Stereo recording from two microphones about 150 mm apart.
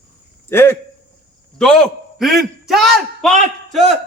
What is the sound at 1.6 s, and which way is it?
A man's voice, 5° left (ahead or behind).